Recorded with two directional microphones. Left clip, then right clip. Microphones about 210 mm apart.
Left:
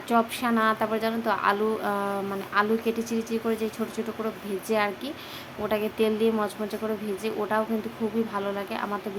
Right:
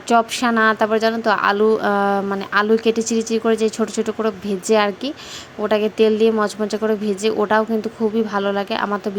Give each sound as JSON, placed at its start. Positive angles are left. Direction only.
{"t": 0.1, "sound": "a woman's voice", "side_deg": -35}